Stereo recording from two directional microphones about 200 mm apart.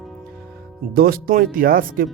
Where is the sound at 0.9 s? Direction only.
45° right (ahead or behind).